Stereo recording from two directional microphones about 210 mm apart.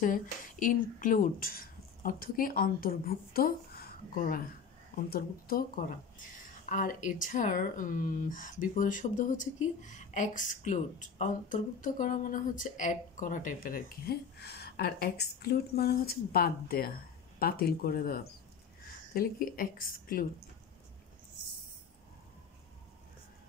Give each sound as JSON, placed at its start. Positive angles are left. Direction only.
{"t": 0.0, "sound": "a woman's voice", "side_deg": 40}